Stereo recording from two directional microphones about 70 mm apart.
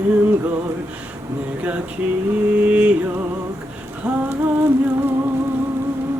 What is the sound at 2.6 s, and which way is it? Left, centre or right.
Vehicle, centre.